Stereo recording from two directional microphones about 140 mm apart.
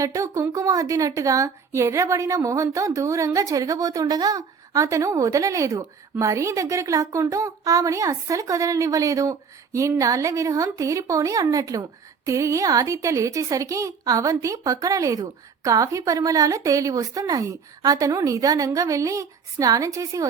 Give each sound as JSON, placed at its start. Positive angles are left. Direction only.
{"t": 0.0, "sound": "a woman's voice", "side_deg": -25}